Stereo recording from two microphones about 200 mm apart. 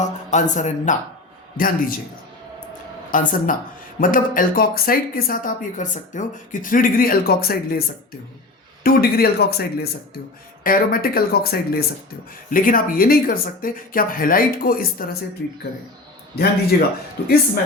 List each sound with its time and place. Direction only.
0.0 s speech: 35° left (ahead or behind)
3.1 s speech: 40° left (ahead or behind)
16.7 s speech: 50° left (ahead or behind)